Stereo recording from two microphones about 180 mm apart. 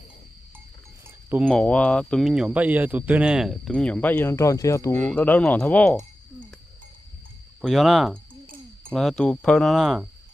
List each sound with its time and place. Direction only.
1.5 s speech: 5° left (ahead or behind)
7.6 s speech: centre (ahead or behind)